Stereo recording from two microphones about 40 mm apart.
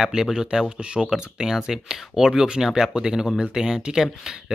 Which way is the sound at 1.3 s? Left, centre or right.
Centre.